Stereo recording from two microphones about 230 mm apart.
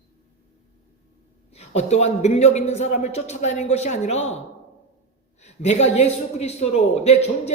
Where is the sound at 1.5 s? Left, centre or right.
Left.